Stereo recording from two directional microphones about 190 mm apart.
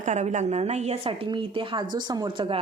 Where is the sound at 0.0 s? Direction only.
40° right (ahead or behind).